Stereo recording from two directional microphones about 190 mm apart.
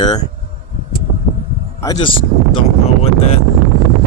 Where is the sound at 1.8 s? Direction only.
25° left (ahead or behind).